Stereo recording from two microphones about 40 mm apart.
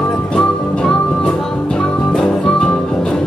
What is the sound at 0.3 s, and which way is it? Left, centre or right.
Music, left.